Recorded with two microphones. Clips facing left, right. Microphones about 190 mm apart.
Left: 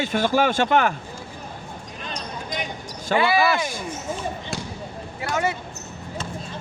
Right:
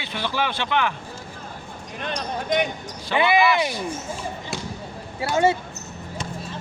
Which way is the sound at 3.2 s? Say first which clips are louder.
Right 1 dB; 20° right (ahead or behind).